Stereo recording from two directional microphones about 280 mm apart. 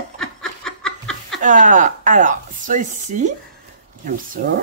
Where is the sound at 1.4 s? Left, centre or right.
Right.